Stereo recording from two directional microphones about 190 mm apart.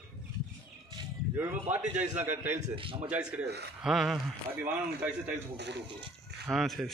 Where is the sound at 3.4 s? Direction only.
60° right (ahead or behind).